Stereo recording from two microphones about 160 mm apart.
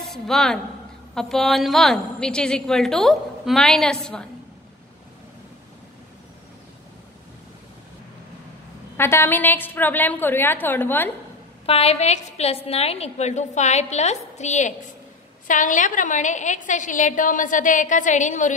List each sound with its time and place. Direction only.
0.0 s a woman's voice: centre (ahead or behind)
8.9 s a woman's voice: 15° left (ahead or behind)
11.6 s a woman's voice: 40° left (ahead or behind)